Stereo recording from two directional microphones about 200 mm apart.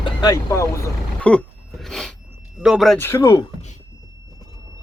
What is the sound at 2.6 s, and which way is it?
Speech, centre (ahead or behind).